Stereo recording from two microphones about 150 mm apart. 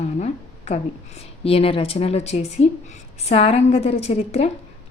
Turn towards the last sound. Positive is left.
turn(degrees=40)  # may be behind; listen again after turning